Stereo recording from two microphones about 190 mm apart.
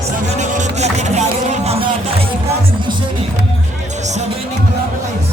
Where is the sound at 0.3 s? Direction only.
40° right (ahead or behind).